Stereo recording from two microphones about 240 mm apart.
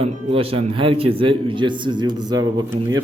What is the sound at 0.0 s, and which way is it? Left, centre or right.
Speech, right.